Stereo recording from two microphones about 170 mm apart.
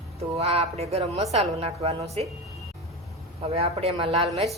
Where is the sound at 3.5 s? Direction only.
35° right (ahead or behind).